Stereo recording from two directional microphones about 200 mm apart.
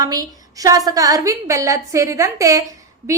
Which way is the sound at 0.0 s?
20° right (ahead or behind).